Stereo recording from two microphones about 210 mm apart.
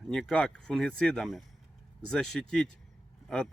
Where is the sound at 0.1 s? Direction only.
5° left (ahead or behind).